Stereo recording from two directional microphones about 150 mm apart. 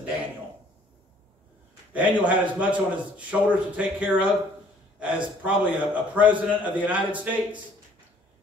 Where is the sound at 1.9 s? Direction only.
10° right (ahead or behind).